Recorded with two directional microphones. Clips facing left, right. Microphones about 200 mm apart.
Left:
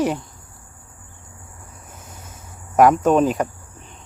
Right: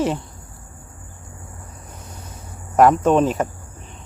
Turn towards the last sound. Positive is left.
turn(degrees=0)  # may be behind; listen again after turning